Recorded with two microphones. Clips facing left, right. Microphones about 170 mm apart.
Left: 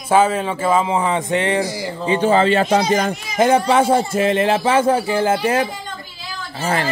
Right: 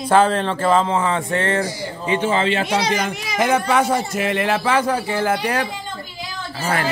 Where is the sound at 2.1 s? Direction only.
40° left (ahead or behind).